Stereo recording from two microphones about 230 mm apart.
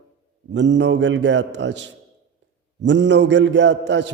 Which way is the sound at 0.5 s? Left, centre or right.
Right.